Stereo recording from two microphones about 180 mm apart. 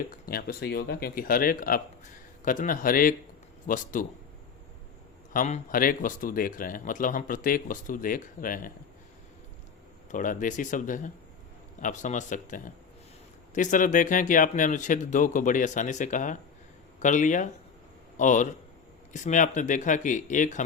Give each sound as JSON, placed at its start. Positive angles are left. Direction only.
{"t": 0.1, "sound": "speech", "side_deg": 55}
{"t": 5.3, "sound": "speech", "side_deg": 50}
{"t": 10.1, "sound": "a man's voice", "side_deg": 45}